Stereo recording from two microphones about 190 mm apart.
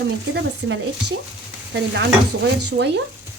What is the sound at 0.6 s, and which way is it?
Speech, 55° right (ahead or behind).